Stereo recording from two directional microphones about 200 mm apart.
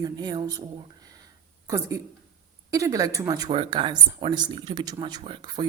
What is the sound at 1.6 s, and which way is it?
Speech, 15° right (ahead or behind).